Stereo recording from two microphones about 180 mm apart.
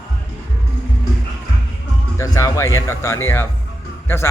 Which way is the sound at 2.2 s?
20° left (ahead or behind).